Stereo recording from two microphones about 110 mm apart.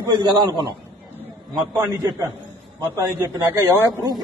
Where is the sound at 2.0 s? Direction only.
40° right (ahead or behind).